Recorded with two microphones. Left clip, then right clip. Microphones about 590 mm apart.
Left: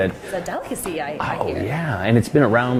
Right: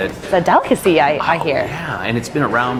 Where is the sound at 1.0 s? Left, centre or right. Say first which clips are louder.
Right 10 dB; right.